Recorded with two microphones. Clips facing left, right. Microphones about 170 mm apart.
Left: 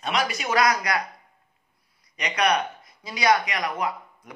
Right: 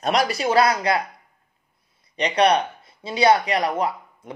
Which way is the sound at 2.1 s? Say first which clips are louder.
Right 5 dB; 30° right (ahead or behind).